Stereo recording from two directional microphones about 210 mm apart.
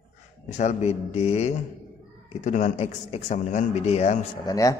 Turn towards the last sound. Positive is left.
turn(degrees=15)  # may be behind; listen again after turning